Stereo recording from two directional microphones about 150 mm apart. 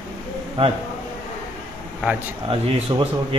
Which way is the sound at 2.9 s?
30° right (ahead or behind).